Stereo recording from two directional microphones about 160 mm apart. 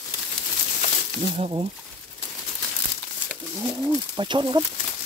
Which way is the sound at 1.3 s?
35° right (ahead or behind).